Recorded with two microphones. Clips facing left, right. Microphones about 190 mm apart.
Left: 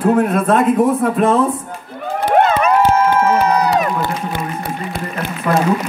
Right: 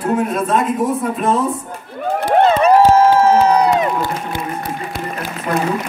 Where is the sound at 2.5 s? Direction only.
35° right (ahead or behind).